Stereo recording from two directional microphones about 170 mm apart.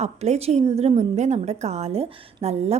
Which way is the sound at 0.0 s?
40° right (ahead or behind).